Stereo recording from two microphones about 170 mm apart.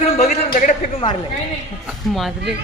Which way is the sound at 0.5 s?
50° left (ahead or behind).